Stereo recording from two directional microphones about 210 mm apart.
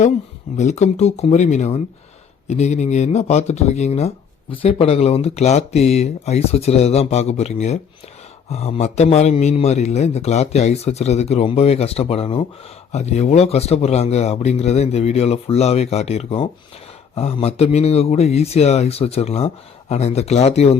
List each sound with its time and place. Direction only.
0.5 s a man's voice: 35° left (ahead or behind)